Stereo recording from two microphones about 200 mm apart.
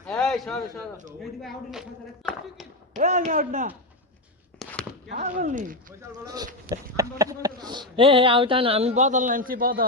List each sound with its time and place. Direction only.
0.0 s a sound: 5° left (ahead or behind)
1.2 s speech: centre (ahead or behind)
2.9 s speech: 35° right (ahead or behind)
4.6 s a sound: 5° left (ahead or behind)
5.4 s speech: 40° right (ahead or behind)
6.0 s insect: 20° right (ahead or behind); by 9.8 s 45° right (ahead or behind)